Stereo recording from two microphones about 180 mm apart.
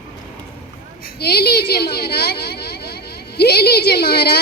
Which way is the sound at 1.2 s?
60° left (ahead or behind).